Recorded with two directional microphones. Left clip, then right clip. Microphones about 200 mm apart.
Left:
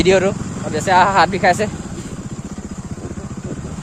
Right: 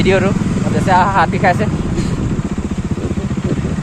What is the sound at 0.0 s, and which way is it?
Speech, 70° left (ahead or behind).